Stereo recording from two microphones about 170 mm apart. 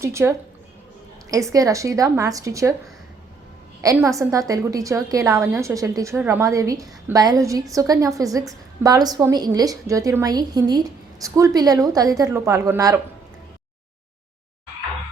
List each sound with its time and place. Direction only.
0.0 s a woman's voice: 15° right (ahead or behind)
3.9 s a woman's voice: 20° right (ahead or behind)